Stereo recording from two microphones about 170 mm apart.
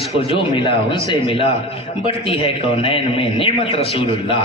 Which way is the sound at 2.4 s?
30° left (ahead or behind).